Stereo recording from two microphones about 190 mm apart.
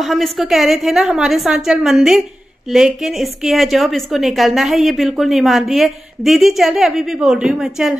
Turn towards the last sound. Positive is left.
turn(degrees=-5)  # may be behind; listen again after turning